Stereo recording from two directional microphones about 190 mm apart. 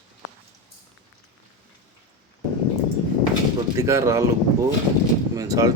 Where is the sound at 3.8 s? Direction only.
15° right (ahead or behind).